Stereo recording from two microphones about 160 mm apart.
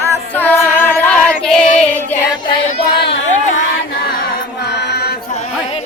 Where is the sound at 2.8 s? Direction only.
85° left.